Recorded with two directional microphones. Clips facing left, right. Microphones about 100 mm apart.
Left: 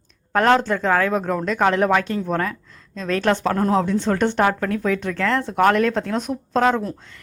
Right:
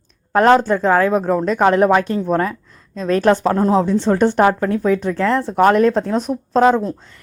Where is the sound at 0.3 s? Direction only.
35° right (ahead or behind).